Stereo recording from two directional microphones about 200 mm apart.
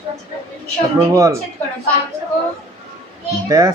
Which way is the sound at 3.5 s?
15° right (ahead or behind).